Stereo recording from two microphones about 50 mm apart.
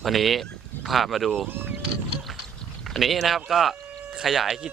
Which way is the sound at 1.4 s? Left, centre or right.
Right.